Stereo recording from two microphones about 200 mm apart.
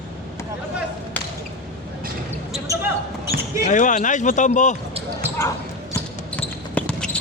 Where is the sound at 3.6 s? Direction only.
40° left (ahead or behind).